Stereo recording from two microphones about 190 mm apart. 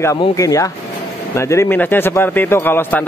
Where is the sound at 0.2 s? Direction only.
20° left (ahead or behind).